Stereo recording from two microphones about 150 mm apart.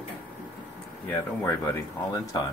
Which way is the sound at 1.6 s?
20° left (ahead or behind).